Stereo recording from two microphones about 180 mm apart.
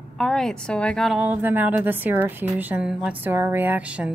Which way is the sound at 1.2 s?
10° right (ahead or behind).